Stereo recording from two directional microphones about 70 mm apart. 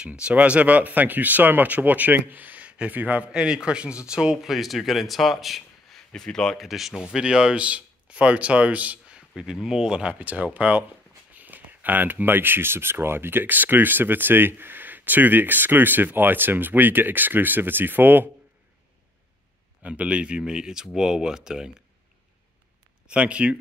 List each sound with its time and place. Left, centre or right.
0.0 s speech: centre
6.7 s speech: centre
7.0 s speech: centre
9.4 s speech: centre; by 18.3 s right
19.8 s speech: centre
23.0 s speech: centre